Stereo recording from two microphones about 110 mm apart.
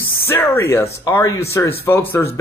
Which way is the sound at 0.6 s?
20° left (ahead or behind).